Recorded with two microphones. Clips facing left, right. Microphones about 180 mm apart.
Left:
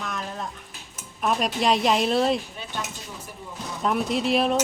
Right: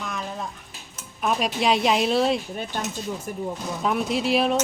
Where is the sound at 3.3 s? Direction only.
55° right (ahead or behind).